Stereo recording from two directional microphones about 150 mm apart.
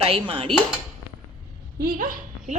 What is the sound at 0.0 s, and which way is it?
Speech, 40° right (ahead or behind).